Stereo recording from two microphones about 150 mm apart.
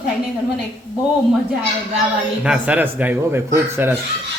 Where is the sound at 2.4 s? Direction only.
10° right (ahead or behind).